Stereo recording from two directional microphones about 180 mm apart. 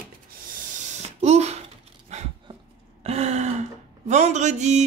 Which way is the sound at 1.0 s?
35° right (ahead or behind).